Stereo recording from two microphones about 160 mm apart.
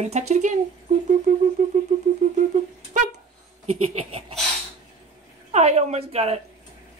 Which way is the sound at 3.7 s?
40° right (ahead or behind).